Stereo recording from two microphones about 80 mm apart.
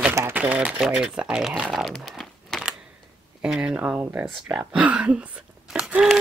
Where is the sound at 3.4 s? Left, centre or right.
Centre.